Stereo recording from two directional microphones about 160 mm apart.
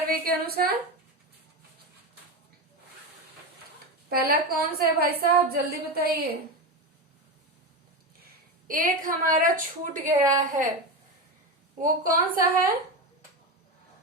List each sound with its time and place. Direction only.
0.1 s a woman's voice: 70° right (ahead or behind)
4.1 s a woman's voice: 70° right (ahead or behind)
8.6 s a woman's voice: 60° right (ahead or behind)
10.1 s a woman's voice: 20° right (ahead or behind)
11.8 s a woman's voice: 60° right (ahead or behind)